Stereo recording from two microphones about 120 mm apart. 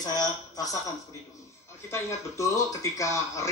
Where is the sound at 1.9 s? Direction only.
25° left (ahead or behind).